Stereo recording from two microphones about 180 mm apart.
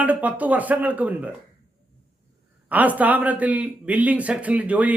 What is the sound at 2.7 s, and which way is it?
A man's voice, 10° right (ahead or behind).